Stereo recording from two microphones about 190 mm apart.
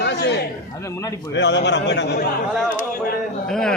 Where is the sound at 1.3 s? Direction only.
65° left (ahead or behind).